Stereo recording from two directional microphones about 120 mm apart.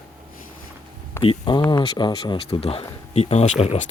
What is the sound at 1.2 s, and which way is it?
Speech, 40° left (ahead or behind).